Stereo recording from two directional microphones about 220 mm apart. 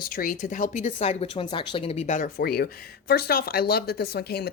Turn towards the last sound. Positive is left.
turn(degrees=45)  # may be behind; listen again after turning